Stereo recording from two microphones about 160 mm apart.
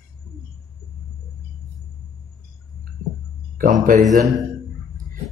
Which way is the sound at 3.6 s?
55° right (ahead or behind).